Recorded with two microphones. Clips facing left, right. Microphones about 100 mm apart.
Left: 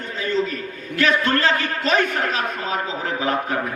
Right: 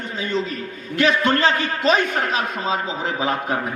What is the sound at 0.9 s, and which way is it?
A man's voice, 20° right (ahead or behind).